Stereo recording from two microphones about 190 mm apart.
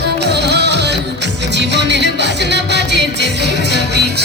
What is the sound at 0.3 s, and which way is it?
Music, 60° right (ahead or behind).